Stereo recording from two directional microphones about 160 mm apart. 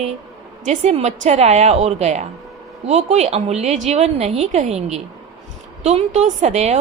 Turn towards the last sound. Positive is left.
turn(degrees=-45)  # may be behind; listen again after turning